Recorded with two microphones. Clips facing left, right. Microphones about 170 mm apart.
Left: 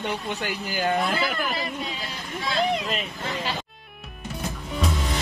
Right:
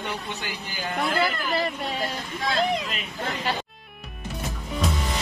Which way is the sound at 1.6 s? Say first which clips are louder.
Right 4 dB; 55° right (ahead or behind).